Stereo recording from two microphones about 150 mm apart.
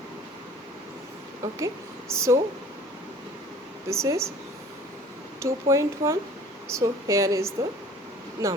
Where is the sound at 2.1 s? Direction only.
20° right (ahead or behind).